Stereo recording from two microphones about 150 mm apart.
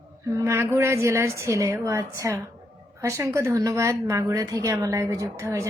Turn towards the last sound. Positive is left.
turn(degrees=-20)  # may be behind; listen again after turning